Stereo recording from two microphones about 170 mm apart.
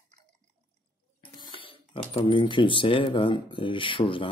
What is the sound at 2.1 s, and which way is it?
Speech, 30° left (ahead or behind).